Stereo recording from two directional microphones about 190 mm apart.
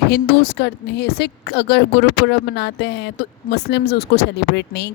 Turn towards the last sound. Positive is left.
turn(degrees=65)  # may be behind; listen again after turning